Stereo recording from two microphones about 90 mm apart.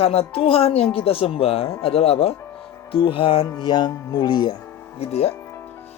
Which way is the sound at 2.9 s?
80° left.